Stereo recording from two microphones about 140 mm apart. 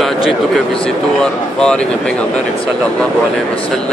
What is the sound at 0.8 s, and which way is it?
Speech, 5° left (ahead or behind).